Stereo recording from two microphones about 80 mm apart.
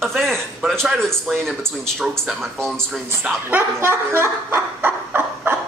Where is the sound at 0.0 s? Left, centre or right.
Centre.